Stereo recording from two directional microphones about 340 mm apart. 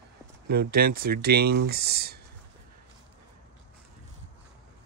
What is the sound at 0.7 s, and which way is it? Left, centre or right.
Speech, right.